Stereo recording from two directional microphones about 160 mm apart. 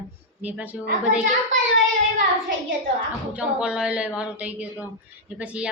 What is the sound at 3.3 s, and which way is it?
A woman's voice, 5° right (ahead or behind).